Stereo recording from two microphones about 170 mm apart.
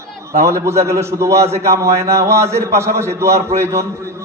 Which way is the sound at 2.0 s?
15° right (ahead or behind).